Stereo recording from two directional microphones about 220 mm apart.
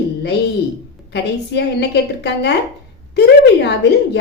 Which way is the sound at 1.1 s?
50° left (ahead or behind).